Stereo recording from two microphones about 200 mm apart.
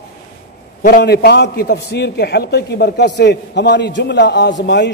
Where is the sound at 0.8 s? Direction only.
50° left (ahead or behind).